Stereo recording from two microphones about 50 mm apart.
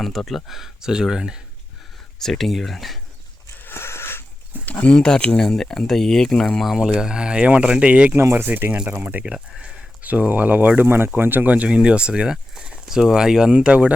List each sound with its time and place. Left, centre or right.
0.0 s speech: centre
2.1 s speech: centre
3.6 s a sound: left
4.6 s speech: left
4.9 s speech: centre
7.0 s speech: centre
8.2 s speech: right
8.7 s speech: right
9.0 s speech: right
9.6 s a sound: centre
10.0 s speech: right
11.5 s speech: right